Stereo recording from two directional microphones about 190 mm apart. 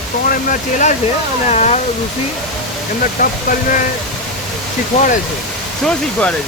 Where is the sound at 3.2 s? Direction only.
45° left (ahead or behind).